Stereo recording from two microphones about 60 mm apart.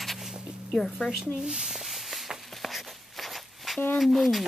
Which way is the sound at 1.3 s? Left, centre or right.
Centre.